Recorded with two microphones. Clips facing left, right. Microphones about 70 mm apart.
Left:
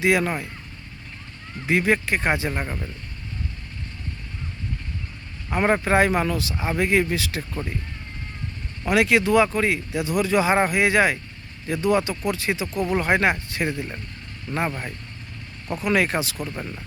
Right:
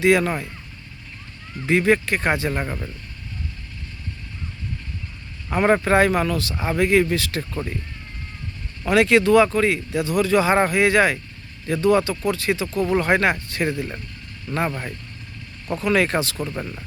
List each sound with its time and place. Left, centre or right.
0.0 s speech: centre
1.6 s speech: centre
2.6 s speech: centre
5.5 s speech: centre
8.9 s speech: centre
15.7 s speech: centre